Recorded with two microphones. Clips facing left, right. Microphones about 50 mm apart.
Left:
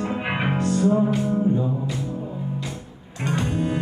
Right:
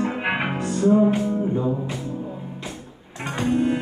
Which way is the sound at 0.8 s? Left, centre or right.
Right.